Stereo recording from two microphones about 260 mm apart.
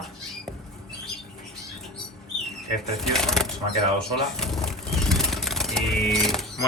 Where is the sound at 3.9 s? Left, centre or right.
Centre.